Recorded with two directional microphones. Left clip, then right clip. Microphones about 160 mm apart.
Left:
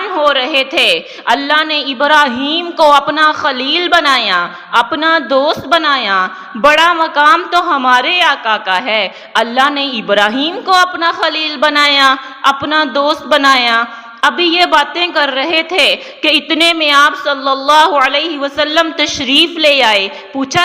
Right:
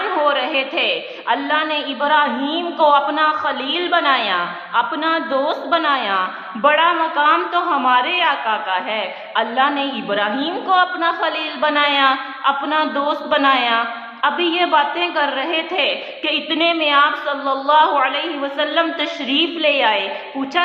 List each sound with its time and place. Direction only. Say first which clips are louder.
0.3 s a woman's voice: left 6 dB; 30° left (ahead or behind)